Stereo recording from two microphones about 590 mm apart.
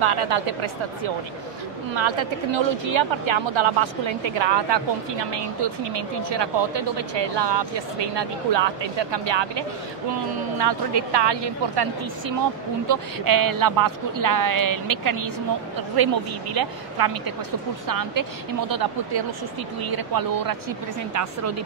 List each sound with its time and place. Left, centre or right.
0.0 s speech: right
2.0 s a woman's voice: right